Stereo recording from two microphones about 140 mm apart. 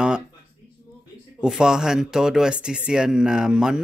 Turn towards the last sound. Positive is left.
turn(degrees=-5)  # may be behind; listen again after turning